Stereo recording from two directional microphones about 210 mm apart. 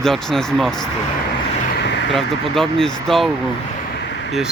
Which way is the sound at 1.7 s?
55° left (ahead or behind).